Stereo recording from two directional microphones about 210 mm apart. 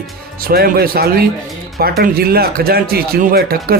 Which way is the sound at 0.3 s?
45° right (ahead or behind).